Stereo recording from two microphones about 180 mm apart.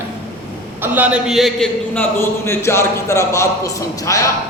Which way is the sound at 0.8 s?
10° right (ahead or behind).